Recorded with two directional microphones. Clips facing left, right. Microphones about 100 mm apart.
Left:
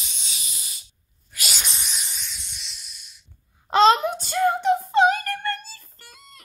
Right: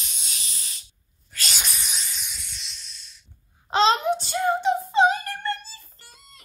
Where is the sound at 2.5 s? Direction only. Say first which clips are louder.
Even; 10° left (ahead or behind).